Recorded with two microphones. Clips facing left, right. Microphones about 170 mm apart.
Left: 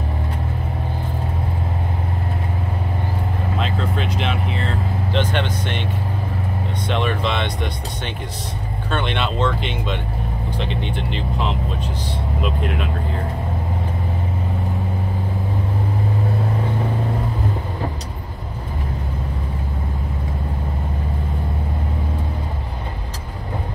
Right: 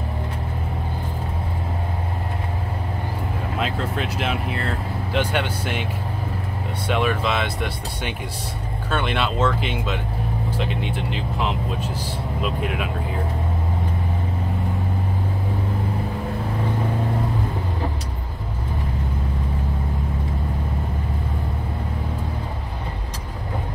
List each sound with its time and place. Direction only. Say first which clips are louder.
3.5 s speech: left 1 dB; 5° right (ahead or behind)
6.9 s speech: right 1 dB; 5° right (ahead or behind)